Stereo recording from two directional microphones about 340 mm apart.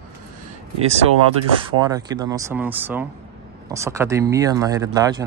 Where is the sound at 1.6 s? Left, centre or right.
Centre.